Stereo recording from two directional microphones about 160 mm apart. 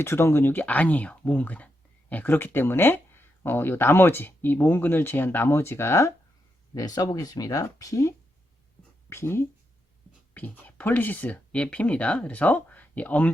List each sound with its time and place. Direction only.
0.0 s speech: 15° left (ahead or behind)